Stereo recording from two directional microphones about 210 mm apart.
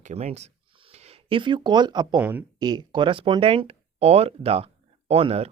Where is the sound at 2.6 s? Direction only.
20° right (ahead or behind).